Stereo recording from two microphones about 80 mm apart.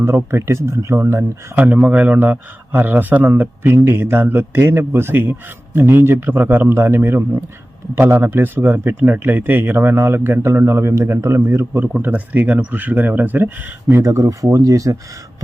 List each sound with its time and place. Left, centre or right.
0.3 s speech: right
1.5 s a man's voice: right
13.9 s speech: right